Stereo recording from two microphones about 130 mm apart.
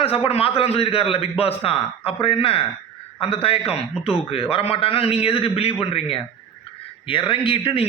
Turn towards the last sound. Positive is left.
turn(degrees=40)  # may be behind; listen again after turning